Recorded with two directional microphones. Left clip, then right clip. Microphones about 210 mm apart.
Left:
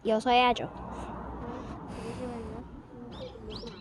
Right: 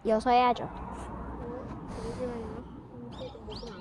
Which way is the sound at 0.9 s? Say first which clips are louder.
Left 1 dB; 35° right (ahead or behind).